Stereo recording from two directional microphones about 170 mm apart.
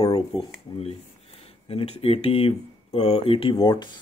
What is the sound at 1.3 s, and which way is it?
Speech, 35° left (ahead or behind).